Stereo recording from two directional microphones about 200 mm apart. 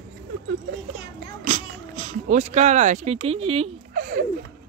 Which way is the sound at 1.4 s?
40° right (ahead or behind).